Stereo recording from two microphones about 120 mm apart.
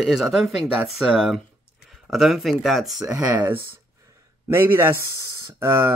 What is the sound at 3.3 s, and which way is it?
Speech, 20° right (ahead or behind).